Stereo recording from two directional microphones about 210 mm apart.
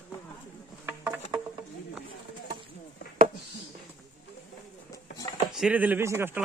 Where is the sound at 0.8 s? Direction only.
5° right (ahead or behind).